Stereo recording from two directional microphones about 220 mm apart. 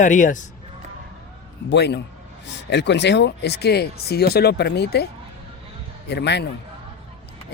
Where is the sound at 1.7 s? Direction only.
50° left (ahead or behind).